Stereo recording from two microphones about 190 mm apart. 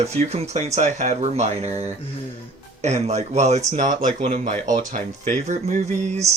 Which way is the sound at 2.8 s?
35° right (ahead or behind).